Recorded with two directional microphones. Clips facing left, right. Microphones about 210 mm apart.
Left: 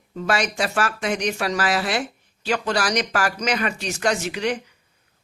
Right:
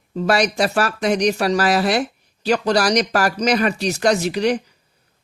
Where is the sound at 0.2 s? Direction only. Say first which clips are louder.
Right 5 dB; 40° right (ahead or behind).